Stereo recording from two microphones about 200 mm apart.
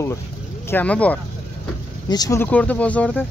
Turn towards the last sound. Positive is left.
turn(degrees=5)  # may be behind; listen again after turning